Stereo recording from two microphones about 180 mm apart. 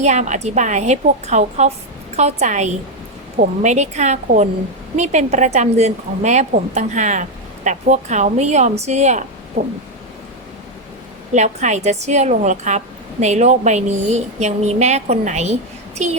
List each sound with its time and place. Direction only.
0.0 s a woman's voice: 40° right (ahead or behind)
11.3 s a woman's voice: 40° right (ahead or behind)